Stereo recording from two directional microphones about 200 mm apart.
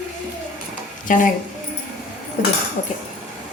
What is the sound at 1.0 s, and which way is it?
Speech, 40° left (ahead or behind).